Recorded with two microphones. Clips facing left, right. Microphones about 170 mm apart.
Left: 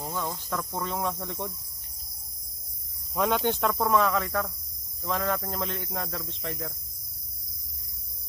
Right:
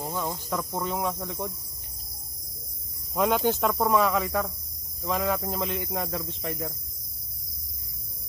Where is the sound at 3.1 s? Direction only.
5° right (ahead or behind).